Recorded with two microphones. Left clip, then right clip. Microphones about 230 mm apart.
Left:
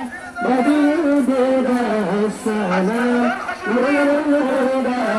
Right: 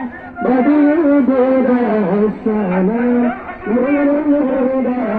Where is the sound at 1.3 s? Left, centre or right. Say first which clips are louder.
Right 4 dB; left.